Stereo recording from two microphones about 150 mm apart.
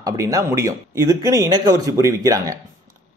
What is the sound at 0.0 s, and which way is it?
A man's voice, 20° right (ahead or behind).